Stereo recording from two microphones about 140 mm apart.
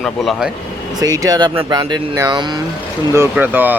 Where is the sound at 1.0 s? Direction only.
25° right (ahead or behind).